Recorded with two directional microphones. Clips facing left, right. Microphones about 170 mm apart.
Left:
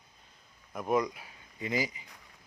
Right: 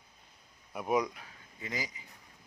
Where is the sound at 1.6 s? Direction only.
15° left (ahead or behind).